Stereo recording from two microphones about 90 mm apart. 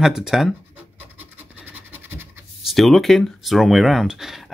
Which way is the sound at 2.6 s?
Centre (ahead or behind).